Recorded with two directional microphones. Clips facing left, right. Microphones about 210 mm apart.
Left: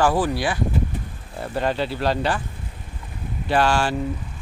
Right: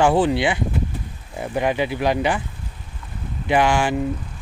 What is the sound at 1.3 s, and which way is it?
Speech, 15° right (ahead or behind).